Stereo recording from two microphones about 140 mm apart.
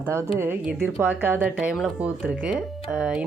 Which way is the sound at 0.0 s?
20° right (ahead or behind).